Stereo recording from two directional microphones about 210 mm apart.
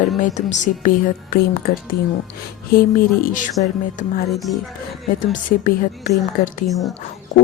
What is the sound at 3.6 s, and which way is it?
Speech, 35° left (ahead or behind).